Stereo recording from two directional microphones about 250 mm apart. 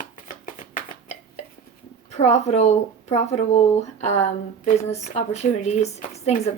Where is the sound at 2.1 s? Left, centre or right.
Left.